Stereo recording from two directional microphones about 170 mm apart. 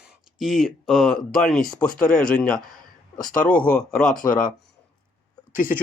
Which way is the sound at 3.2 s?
55° left (ahead or behind).